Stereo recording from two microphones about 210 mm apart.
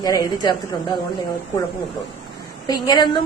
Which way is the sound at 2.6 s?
15° left (ahead or behind).